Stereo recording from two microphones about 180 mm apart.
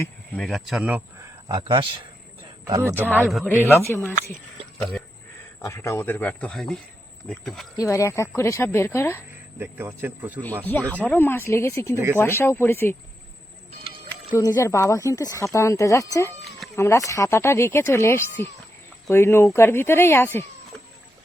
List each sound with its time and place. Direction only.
0.3 s speech: centre (ahead or behind)
1.5 s speech: 25° right (ahead or behind)
2.6 s speech: 15° right (ahead or behind)
3.2 s speech: centre (ahead or behind)
3.5 s speech: 10° left (ahead or behind)
5.6 s speech: 15° left (ahead or behind)
7.8 s speech: 15° left (ahead or behind)
9.6 s speech: 10° right (ahead or behind)
10.7 s speech: 10° left (ahead or behind)
14.3 s speech: 15° left (ahead or behind)